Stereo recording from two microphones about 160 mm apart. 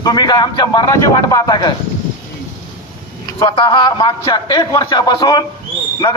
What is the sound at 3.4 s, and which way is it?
A man's voice, 30° left (ahead or behind).